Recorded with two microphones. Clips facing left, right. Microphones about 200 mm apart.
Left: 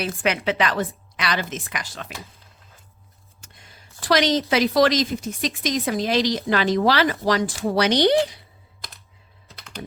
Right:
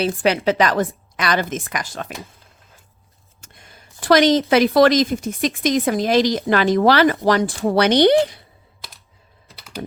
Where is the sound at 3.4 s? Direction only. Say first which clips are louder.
Right 3 dB; 50° right (ahead or behind).